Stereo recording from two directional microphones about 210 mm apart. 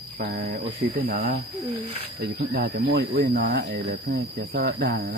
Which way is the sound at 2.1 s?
50° right (ahead or behind).